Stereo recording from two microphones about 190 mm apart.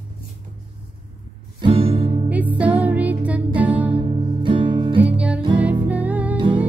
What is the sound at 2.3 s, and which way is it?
Music, 10° right (ahead or behind).